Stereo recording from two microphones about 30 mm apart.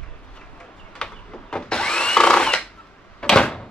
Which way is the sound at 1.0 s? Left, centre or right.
Left.